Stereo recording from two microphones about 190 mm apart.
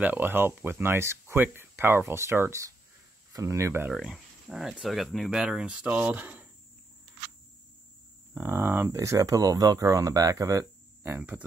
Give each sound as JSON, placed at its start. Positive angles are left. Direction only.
{"t": 0.0, "sound": "speech", "side_deg": -10}
{"t": 3.9, "sound": "speech", "side_deg": 0}
{"t": 8.4, "sound": "speech", "side_deg": -10}